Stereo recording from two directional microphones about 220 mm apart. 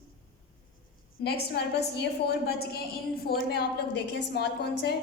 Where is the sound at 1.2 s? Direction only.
45° left (ahead or behind).